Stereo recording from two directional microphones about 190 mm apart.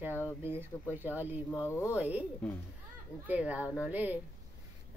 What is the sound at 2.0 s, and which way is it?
Speech, 10° right (ahead or behind).